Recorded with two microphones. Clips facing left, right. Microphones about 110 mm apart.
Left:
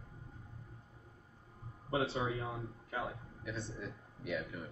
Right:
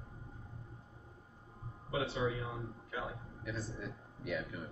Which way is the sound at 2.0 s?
30° left (ahead or behind).